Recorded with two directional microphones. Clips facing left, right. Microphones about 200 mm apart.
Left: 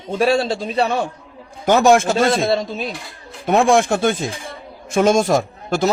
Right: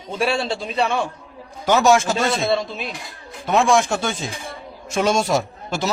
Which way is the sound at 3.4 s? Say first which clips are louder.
Left 3 dB; 55° left (ahead or behind).